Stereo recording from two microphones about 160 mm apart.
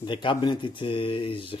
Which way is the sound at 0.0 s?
30° left (ahead or behind).